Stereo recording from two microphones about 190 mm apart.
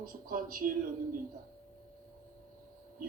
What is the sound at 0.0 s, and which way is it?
Speech, 50° right (ahead or behind).